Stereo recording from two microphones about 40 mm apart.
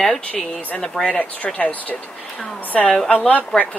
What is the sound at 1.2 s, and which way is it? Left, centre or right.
Speech, left.